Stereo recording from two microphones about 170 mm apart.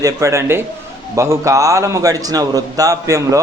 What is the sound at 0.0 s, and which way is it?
A man's voice, 20° right (ahead or behind).